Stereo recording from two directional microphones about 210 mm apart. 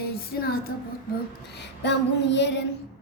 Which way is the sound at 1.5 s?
55° left (ahead or behind).